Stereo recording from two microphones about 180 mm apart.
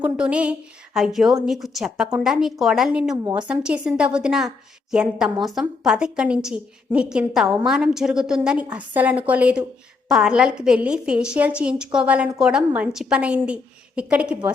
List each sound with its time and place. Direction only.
0.0 s a woman's voice: 5° right (ahead or behind)